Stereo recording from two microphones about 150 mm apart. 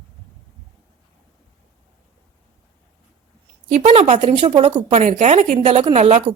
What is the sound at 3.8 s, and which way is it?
Speech, 40° right (ahead or behind).